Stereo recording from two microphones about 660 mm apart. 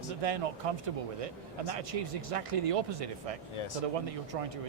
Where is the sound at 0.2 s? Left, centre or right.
Right.